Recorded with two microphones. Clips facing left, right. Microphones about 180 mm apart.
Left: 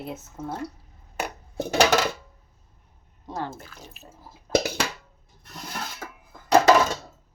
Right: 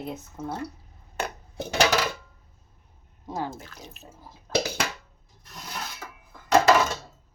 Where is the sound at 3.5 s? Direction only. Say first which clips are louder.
Right 1 dB; 5° left (ahead or behind).